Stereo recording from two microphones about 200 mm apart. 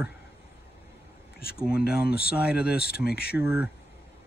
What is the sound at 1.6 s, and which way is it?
Speech, 5° right (ahead or behind).